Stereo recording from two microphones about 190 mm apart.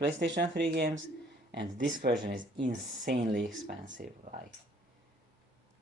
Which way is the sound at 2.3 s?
45° right (ahead or behind).